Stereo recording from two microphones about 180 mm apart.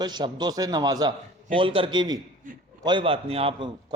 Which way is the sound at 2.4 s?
45° right (ahead or behind).